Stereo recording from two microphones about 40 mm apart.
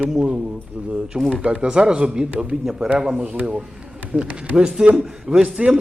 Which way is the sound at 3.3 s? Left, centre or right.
Right.